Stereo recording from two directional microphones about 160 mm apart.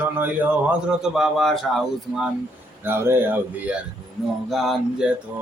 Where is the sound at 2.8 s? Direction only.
15° right (ahead or behind).